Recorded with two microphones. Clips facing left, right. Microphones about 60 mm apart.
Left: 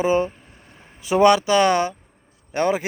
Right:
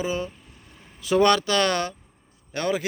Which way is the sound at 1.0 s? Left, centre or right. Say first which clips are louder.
Left 4 dB; centre.